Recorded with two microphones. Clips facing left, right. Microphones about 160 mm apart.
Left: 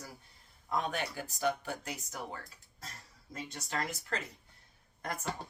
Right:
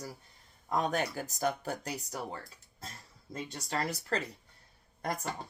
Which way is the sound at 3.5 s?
35° right (ahead or behind).